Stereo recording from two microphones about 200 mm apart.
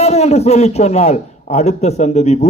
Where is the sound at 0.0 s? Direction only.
35° left (ahead or behind).